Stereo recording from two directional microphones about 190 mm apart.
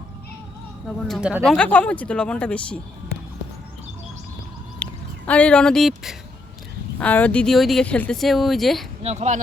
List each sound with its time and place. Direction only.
0.9 s speech: centre (ahead or behind)
4.8 s speech: 5° left (ahead or behind)
9.0 s speech: 40° right (ahead or behind)